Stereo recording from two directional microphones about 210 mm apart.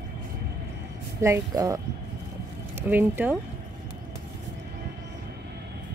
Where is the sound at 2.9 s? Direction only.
10° right (ahead or behind).